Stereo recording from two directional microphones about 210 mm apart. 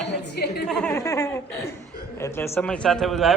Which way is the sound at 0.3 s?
50° left (ahead or behind).